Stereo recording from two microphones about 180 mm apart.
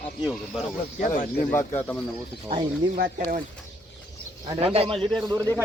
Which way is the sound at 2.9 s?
50° right (ahead or behind).